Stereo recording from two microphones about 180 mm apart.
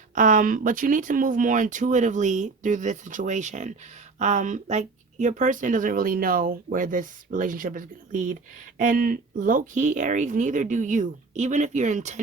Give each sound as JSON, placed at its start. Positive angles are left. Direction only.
{"t": 0.1, "sound": "speech", "side_deg": -45}